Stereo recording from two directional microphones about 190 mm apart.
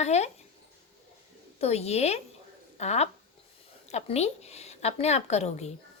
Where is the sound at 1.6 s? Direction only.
35° left (ahead or behind).